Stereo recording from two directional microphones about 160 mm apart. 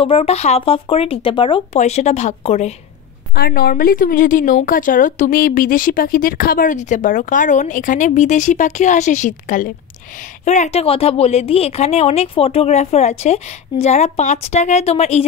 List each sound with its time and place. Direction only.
0.0 s a woman's voice: 35° left (ahead or behind)
1.8 s a woman's voice: 45° left (ahead or behind)
3.3 s a woman's voice: 75° left (ahead or behind); by 15.2 s 40° left (ahead or behind)